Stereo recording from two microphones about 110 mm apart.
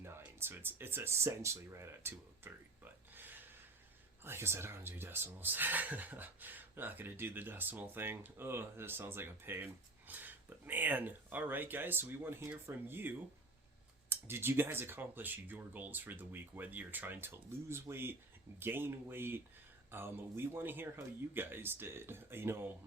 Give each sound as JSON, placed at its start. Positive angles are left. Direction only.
{"t": 0.0, "sound": "speech", "side_deg": -20}